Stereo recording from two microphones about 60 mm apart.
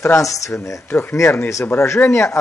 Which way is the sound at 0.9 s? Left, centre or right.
Left.